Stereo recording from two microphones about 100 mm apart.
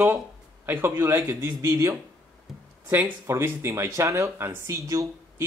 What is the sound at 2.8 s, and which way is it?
Speech, 20° right (ahead or behind).